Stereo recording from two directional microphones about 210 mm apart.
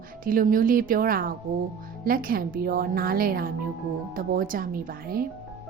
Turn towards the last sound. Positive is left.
turn(degrees=-45)  # may be behind; listen again after turning